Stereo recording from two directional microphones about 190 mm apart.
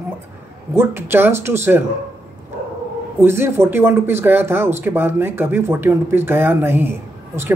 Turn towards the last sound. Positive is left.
turn(degrees=-10)  # may be behind; listen again after turning